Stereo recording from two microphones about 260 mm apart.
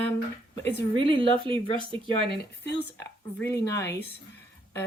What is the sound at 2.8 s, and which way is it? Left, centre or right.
Speech, centre.